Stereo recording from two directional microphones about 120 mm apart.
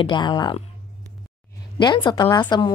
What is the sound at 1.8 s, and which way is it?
Speech, 40° left (ahead or behind).